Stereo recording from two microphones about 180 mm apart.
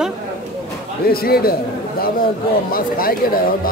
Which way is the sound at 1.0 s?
55° left (ahead or behind).